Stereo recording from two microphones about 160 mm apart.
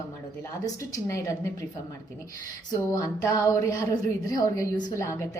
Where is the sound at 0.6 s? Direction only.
20° left (ahead or behind).